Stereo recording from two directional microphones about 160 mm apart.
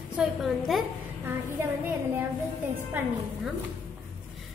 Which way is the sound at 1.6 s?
15° right (ahead or behind).